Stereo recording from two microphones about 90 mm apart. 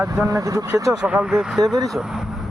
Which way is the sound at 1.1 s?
5° right (ahead or behind).